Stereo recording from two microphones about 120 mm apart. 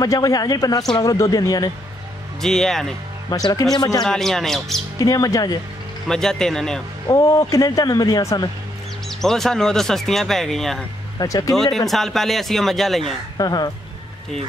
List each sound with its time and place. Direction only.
0.0 s speech: 30° left (ahead or behind)
2.4 s speech: 5° left (ahead or behind)
3.3 s speech: 30° left (ahead or behind)
4.0 s speech: 5° left (ahead or behind)
4.9 s speech: 30° left (ahead or behind)
6.0 s speech: 5° left (ahead or behind)
7.1 s speech: 30° left (ahead or behind)
9.2 s speech: 5° left (ahead or behind)
11.1 s speech: 30° left (ahead or behind)
11.9 s speech: centre (ahead or behind)
13.4 s speech: 35° left (ahead or behind)